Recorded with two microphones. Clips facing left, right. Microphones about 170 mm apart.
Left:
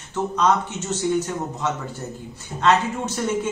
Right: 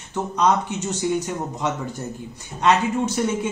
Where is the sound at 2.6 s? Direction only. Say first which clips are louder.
Right 1 dB; 15° right (ahead or behind).